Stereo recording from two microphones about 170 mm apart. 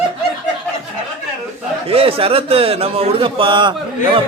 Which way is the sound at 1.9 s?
35° right (ahead or behind).